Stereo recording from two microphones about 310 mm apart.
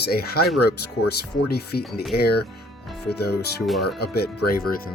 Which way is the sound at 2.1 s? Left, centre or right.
Left.